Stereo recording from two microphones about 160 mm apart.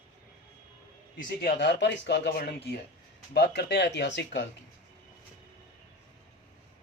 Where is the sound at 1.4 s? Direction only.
80° left.